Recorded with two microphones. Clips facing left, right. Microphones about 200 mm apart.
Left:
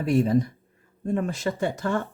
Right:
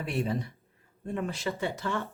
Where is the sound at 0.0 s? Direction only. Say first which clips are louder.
Left 10 dB; 45° left (ahead or behind).